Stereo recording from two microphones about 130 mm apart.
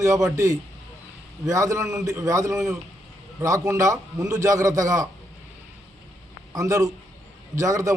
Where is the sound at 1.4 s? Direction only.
25° right (ahead or behind).